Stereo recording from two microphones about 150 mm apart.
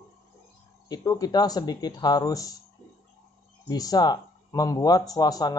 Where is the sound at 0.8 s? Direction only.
25° left (ahead or behind).